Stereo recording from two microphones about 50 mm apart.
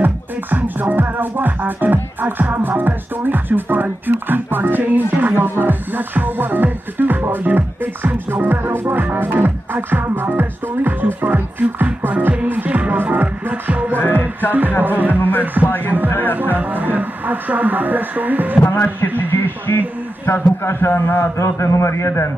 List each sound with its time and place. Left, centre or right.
0.0 s music: right
13.9 s music: left
14.8 s music: right
15.6 s speech: left
16.5 s music: right
18.6 s speech: left
20.2 s a man's voice: left